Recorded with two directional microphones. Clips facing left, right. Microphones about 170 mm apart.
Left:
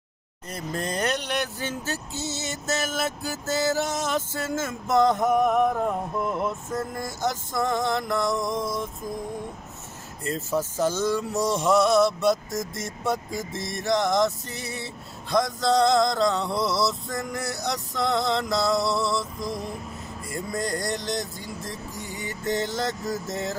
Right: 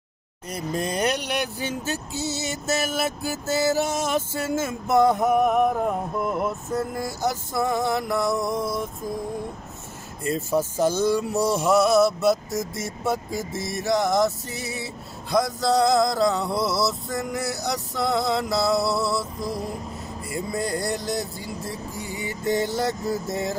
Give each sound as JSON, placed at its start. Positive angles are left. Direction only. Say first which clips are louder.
{"t": 0.5, "sound": "speech", "louder": "right 3 dB", "side_deg": -10}
{"t": 10.2, "sound": "speech", "louder": "right 3 dB", "side_deg": -15}